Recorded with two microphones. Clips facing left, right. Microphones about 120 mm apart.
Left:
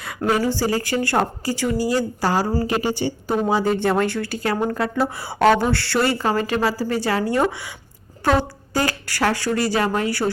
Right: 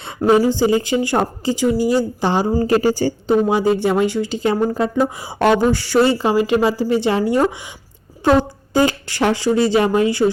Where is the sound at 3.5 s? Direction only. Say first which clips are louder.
Right 3 dB; 15° right (ahead or behind).